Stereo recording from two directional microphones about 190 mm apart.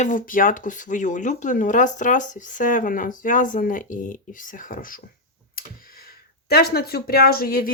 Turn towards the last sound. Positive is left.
turn(degrees=50)  # may be behind; listen again after turning